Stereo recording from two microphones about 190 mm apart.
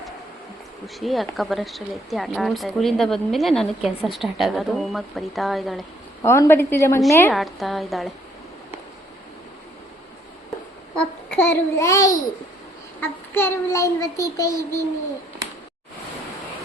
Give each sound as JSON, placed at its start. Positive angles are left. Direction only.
{"t": 0.9, "sound": "speech", "side_deg": 0}
{"t": 6.2, "sound": "a child's voice", "side_deg": 15}
{"t": 7.3, "sound": "speech", "side_deg": 0}
{"t": 10.9, "sound": "babbling", "side_deg": 10}
{"t": 13.0, "sound": "a child's voice", "side_deg": 10}